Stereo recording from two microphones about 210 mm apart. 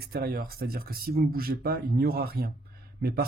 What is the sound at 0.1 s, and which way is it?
Speech, 45° right (ahead or behind).